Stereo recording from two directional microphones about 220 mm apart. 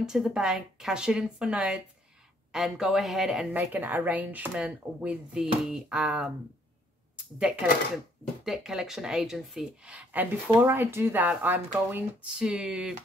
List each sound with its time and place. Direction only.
0.0 s speech: 5° right (ahead or behind)
8.5 s speech: centre (ahead or behind)